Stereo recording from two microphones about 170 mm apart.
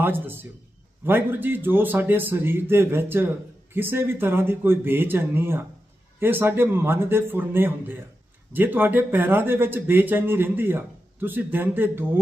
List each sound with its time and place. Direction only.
0.0 s a man's voice: 10° right (ahead or behind)